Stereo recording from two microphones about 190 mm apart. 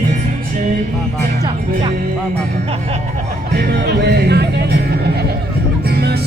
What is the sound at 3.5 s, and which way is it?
Speech, 60° right (ahead or behind).